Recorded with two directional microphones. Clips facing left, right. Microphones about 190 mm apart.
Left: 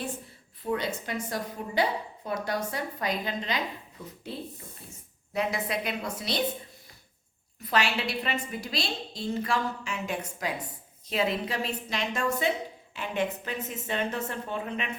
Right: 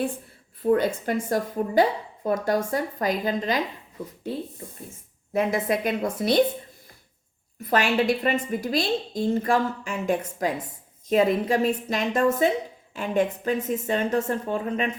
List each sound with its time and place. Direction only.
0.6 s a woman's voice: 35° right (ahead or behind)
1.0 s a woman's voice: 50° right (ahead or behind)
5.3 s a woman's voice: 50° right (ahead or behind)
7.7 s a woman's voice: 50° right (ahead or behind)